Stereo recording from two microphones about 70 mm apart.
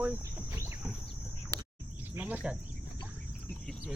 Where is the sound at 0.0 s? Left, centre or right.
Right.